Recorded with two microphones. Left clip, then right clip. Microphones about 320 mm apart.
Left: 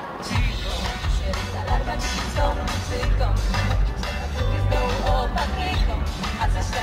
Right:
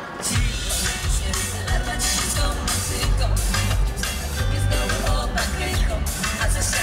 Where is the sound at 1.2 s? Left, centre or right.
Centre.